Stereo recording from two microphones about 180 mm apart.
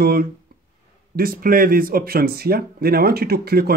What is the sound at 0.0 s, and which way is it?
Speech, 60° right (ahead or behind).